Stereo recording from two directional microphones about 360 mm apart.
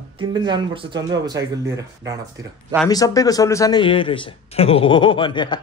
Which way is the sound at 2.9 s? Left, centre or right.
Centre.